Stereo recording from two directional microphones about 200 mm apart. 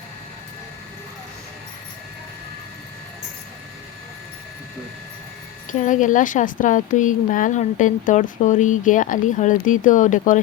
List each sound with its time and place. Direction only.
5.7 s a woman's voice: 40° left (ahead or behind)